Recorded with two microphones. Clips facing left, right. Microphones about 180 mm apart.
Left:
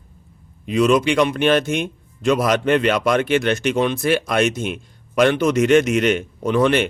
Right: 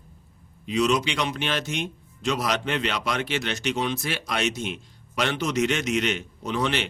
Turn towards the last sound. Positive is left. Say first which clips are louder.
# left 9 dB
turn(degrees=55)  # may be behind; listen again after turning